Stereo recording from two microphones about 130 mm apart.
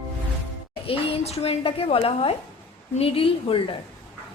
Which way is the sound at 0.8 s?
45° left (ahead or behind).